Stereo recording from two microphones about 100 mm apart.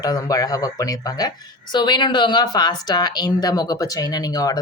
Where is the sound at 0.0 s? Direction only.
40° left (ahead or behind).